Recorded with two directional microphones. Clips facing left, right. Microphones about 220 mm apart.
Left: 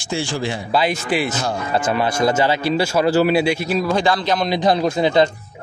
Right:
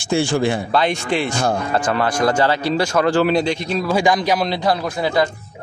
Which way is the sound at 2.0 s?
20° left (ahead or behind).